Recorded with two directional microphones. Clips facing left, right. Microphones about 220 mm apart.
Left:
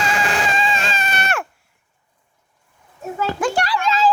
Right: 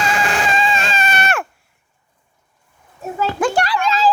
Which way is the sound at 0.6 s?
55° right (ahead or behind).